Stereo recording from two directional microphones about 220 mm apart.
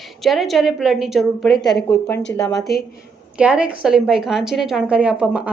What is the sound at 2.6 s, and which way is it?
Speech, 45° left (ahead or behind).